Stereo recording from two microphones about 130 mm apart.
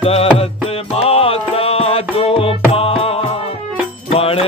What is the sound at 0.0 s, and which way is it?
Mantra, 50° left (ahead or behind).